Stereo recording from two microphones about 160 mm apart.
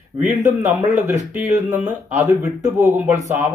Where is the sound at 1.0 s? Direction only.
50° right (ahead or behind).